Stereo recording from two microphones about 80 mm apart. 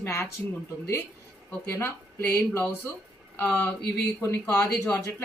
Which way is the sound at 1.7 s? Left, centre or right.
Left.